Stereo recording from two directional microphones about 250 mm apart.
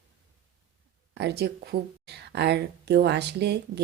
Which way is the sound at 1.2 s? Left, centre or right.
Right.